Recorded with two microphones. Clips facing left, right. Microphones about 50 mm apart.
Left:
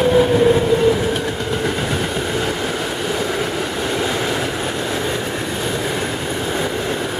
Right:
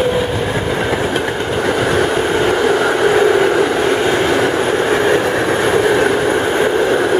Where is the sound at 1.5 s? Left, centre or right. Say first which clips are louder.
Right 8 dB; right.